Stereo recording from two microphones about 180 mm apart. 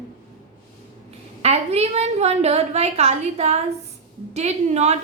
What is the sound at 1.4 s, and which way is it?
A woman's voice, 35° right (ahead or behind).